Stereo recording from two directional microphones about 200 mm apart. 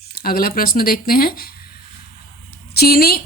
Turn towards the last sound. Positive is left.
turn(degrees=50)  # may be behind; listen again after turning